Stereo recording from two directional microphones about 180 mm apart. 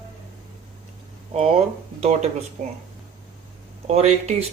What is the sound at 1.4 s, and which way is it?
Speech, 35° right (ahead or behind).